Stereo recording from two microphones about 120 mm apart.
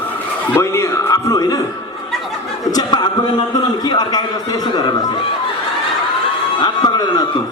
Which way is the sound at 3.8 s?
35° left (ahead or behind).